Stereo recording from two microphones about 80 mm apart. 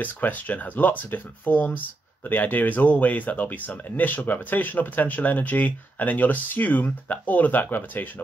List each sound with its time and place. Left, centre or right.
0.0 s speech: left